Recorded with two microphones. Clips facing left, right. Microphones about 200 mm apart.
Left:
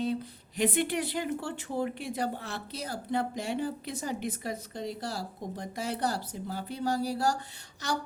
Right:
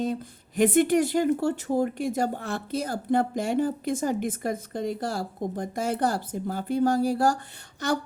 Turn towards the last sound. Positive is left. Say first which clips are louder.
# right 7 dB
turn(degrees=-55)  # may be behind; listen again after turning